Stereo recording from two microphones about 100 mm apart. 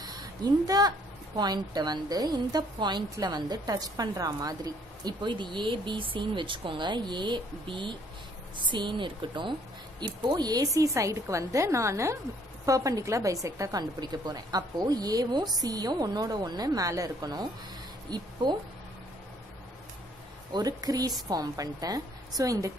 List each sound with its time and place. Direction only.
0.0 s a woman's voice: 40° right (ahead or behind)
20.5 s speech: 40° right (ahead or behind)